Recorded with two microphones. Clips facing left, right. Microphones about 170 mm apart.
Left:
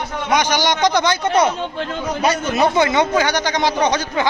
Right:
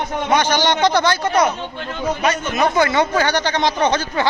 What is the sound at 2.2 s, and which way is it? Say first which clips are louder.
A man's voice: left 3 dB; 30° left (ahead or behind).